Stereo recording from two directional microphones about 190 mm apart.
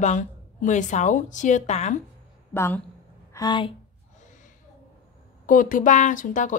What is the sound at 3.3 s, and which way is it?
Speech, 25° left (ahead or behind).